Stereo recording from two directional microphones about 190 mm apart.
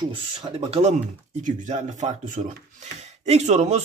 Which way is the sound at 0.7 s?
35° right (ahead or behind).